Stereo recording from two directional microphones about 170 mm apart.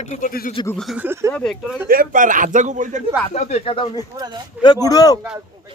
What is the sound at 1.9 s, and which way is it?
Speech, 55° right (ahead or behind).